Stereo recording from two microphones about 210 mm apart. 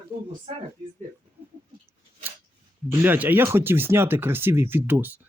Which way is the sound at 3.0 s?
10° right (ahead or behind).